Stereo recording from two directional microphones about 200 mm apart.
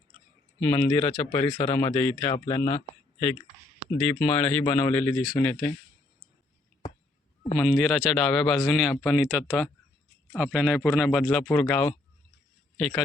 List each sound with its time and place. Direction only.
0.6 s speech: 10° left (ahead or behind)
1.1 s speech: 30° left (ahead or behind)
1.7 s speech: 15° left (ahead or behind)
3.9 s a man's voice: 5° left (ahead or behind)
7.5 s a man's voice: centre (ahead or behind)